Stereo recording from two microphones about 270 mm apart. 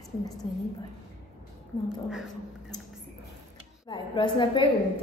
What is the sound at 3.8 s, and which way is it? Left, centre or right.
Speech, centre.